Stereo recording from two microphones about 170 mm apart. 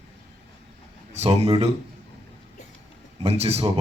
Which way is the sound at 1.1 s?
40° right (ahead or behind).